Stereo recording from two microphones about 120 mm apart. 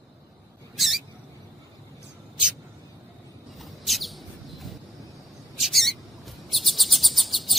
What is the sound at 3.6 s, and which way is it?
Bird, centre (ahead or behind).